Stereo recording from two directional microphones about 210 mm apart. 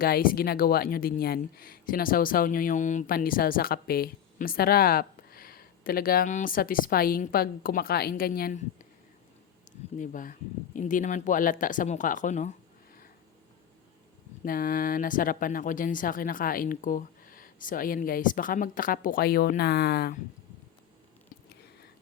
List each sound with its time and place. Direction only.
0.0 s speech: 45° left (ahead or behind)
9.7 s a sound: 35° left (ahead or behind)
10.0 s speech: 40° left (ahead or behind)
14.4 s speech: 45° left (ahead or behind)